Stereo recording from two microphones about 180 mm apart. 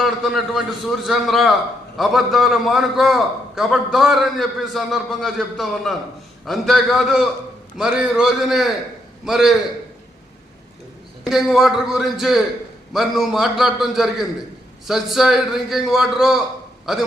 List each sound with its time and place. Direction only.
0.0 s a man's voice: centre (ahead or behind)
11.2 s a man's voice: centre (ahead or behind)